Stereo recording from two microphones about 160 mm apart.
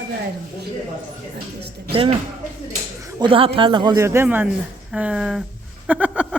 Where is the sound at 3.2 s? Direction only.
35° right (ahead or behind); by 5.4 s 5° right (ahead or behind).